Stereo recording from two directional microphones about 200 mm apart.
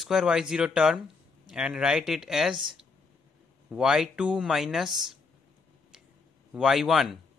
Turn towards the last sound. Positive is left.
turn(degrees=0)  # may be behind; listen again after turning